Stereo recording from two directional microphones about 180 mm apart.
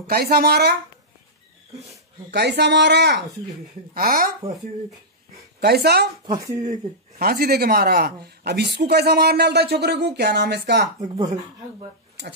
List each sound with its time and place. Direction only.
0.0 s speech: 60° right (ahead or behind)
2.3 s speech: 70° right (ahead or behind)
3.9 s speech: 55° right (ahead or behind)
5.6 s speech: 60° right (ahead or behind)
6.6 s speech: 50° right (ahead or behind)